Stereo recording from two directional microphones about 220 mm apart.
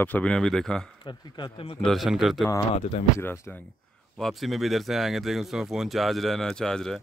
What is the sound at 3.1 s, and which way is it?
Speech, 10° left (ahead or behind).